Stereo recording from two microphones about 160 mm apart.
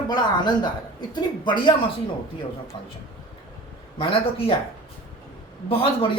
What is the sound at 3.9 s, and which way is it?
Speech, 35° left (ahead or behind).